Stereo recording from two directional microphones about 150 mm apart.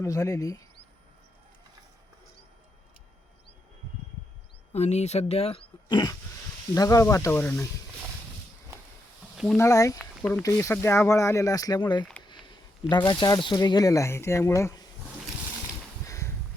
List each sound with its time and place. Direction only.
0.0 s speech: 20° left (ahead or behind)
4.7 s speech: 45° left (ahead or behind)
5.9 s speech: 30° left (ahead or behind)
9.6 s speech: 20° left (ahead or behind)
13.1 s speech: 25° left (ahead or behind)
16.0 s a sound: 20° left (ahead or behind)